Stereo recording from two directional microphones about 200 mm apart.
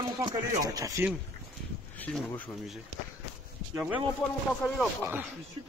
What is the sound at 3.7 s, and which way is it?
Speech, 5° right (ahead or behind).